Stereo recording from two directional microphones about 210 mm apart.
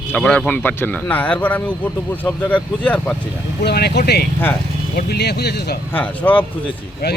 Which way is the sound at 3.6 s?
50° left (ahead or behind).